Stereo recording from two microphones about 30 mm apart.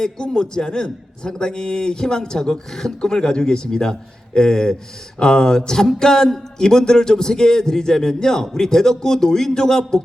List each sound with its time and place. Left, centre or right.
0.0 s a man's voice: left